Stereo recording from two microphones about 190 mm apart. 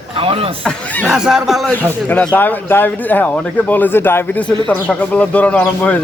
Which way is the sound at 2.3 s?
10° left (ahead or behind).